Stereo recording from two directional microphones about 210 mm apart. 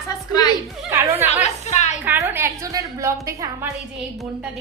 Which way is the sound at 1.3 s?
35° left (ahead or behind).